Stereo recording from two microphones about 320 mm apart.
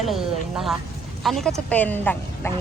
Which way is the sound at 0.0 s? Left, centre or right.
Centre.